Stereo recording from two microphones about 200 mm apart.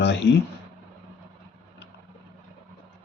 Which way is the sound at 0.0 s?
60° left (ahead or behind).